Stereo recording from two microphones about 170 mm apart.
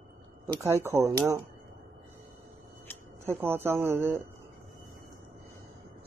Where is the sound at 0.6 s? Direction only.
15° right (ahead or behind).